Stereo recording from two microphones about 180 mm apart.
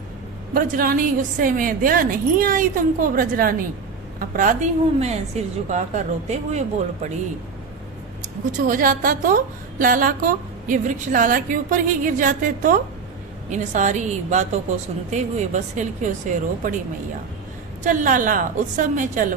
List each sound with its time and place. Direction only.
0.5 s a woman's voice: 50° right (ahead or behind)
8.6 s a woman's voice: 50° right (ahead or behind)
17.8 s a woman's voice: 45° right (ahead or behind)